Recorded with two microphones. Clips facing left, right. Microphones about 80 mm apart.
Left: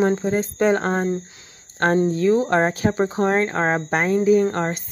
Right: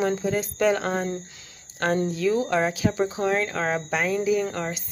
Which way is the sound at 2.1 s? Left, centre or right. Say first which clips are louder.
Left 5 dB; left.